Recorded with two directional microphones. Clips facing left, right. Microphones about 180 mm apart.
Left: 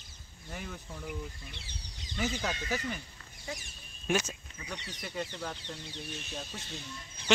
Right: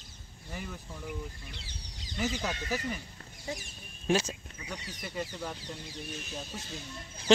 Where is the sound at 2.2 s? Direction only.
Centre (ahead or behind).